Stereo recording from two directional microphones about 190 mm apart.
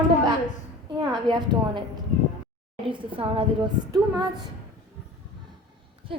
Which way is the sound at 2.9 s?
25° right (ahead or behind).